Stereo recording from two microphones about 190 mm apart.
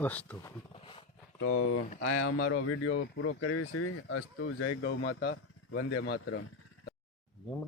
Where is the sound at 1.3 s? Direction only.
90° left.